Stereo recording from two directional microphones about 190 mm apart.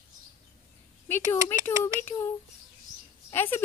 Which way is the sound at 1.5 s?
10° left (ahead or behind).